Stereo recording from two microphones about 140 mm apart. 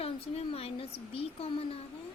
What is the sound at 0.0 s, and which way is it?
A woman's voice, 45° left (ahead or behind).